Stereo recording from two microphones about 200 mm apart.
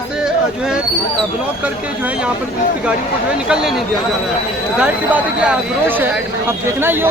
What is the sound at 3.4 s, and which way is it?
Speech, 5° right (ahead or behind).